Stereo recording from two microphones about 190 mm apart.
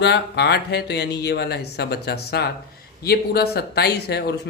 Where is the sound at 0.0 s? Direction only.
60° left (ahead or behind).